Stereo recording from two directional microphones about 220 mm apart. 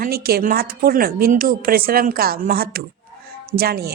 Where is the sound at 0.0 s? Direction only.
45° right (ahead or behind).